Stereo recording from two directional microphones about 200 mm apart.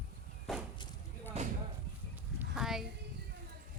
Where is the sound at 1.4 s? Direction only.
35° right (ahead or behind).